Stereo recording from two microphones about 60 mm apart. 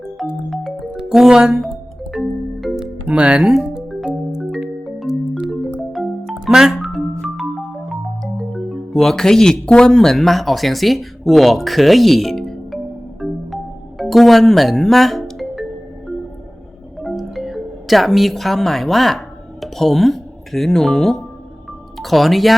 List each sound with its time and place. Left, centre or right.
0.2 s music: centre
3.1 s speech: centre
3.4 s speech: centre
4.9 s music: centre
5.5 s marimba: centre
7.9 s music: centre
9.6 s speech: centre
13.2 s music: centre
14.0 s speech: centre
17.0 s music: centre
21.9 s speech: centre